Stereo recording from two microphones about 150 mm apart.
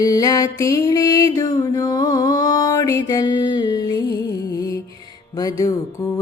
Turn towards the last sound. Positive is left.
turn(degrees=20)  # may be behind; listen again after turning